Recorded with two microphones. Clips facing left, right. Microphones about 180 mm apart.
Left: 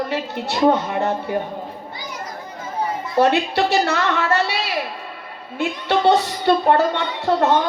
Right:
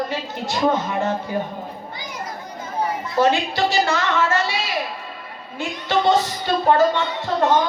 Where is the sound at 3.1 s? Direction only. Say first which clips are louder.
Left 2 dB; 65° left (ahead or behind).